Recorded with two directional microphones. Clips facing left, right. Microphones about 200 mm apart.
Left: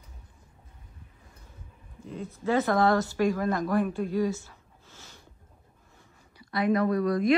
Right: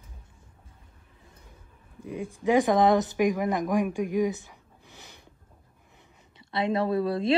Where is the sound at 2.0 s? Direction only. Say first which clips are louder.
Right 3 dB; 10° right (ahead or behind).